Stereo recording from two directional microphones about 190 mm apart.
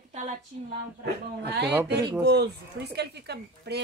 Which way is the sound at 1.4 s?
60° right (ahead or behind).